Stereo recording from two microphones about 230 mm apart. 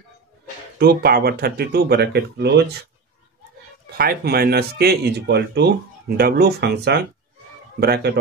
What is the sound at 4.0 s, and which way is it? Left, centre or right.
Speech, right.